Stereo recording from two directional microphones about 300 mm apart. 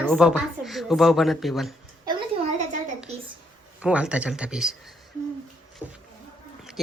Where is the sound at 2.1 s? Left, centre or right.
Centre.